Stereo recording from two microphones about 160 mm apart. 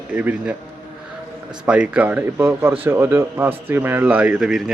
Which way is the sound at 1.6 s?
5° right (ahead or behind).